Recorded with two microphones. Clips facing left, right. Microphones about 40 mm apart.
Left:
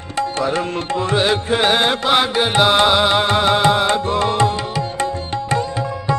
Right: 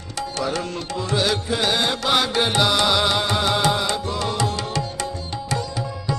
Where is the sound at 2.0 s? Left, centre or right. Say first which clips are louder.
Left 4 dB; centre.